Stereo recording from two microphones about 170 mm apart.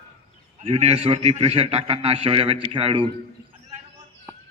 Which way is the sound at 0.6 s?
35° right (ahead or behind).